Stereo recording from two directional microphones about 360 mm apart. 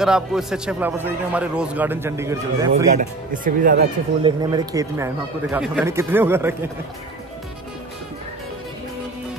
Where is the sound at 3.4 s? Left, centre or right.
Right.